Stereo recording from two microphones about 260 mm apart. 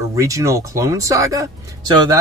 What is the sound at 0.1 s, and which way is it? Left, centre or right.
Speech, centre.